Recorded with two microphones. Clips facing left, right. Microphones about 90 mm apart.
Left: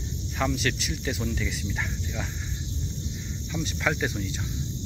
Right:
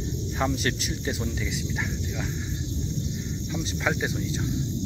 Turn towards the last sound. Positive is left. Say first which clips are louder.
# even
turn(degrees=-15)  # may be behind; listen again after turning